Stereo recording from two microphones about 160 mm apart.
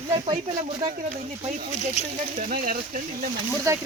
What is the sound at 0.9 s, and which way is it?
Speech, 45° right (ahead or behind).